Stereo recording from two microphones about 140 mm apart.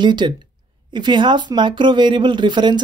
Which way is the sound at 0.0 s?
35° right (ahead or behind).